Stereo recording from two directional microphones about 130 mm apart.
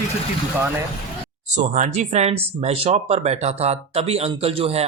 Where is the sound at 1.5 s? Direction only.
70° right (ahead or behind).